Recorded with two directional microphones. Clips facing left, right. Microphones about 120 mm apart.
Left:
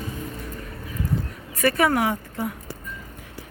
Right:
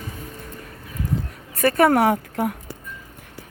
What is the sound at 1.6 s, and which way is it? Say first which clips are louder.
Speech: right 4 dB; 50° right (ahead or behind).